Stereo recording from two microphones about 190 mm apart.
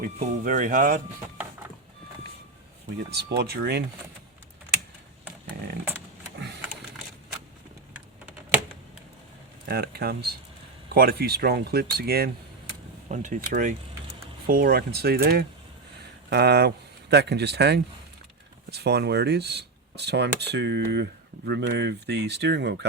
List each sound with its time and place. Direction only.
0.2 s speech: 45° right (ahead or behind)
3.1 s speech: 60° right (ahead or behind)
9.6 s speech: 55° right (ahead or behind)
13.1 s speech: 40° right (ahead or behind); by 22.9 s 60° right (ahead or behind)